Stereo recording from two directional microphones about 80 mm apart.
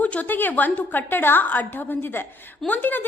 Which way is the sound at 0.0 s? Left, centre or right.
Centre.